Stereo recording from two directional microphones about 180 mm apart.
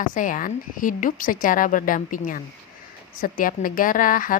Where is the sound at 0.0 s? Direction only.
45° left (ahead or behind).